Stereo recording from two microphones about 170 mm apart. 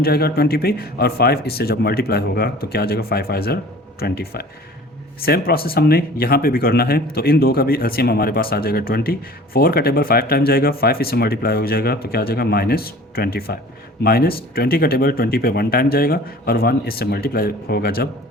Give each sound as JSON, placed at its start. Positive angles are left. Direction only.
{"t": 0.0, "sound": "speech", "side_deg": 65}